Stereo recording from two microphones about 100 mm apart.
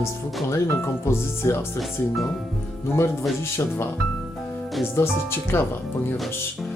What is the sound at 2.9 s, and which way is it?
Speech, 25° left (ahead or behind).